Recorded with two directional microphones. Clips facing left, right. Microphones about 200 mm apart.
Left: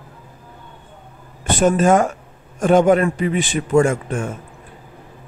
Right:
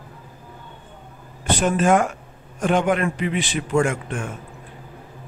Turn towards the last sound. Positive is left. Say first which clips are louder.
# left 4 dB
turn(degrees=40)  # may be behind; listen again after turning